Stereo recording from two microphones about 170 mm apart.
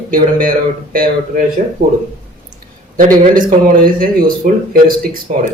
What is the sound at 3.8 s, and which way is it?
Speech, 55° right (ahead or behind).